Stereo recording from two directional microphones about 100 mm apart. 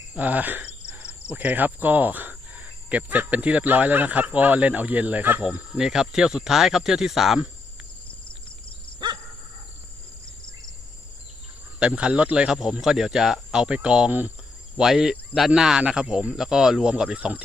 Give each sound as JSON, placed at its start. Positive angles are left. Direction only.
{"t": 0.1, "sound": "cricket", "side_deg": -15}
{"t": 9.0, "sound": "dog", "side_deg": -50}
{"t": 10.4, "sound": "insect", "side_deg": 50}
{"t": 11.8, "sound": "cricket", "side_deg": -10}
{"t": 14.8, "sound": "cricket", "side_deg": -5}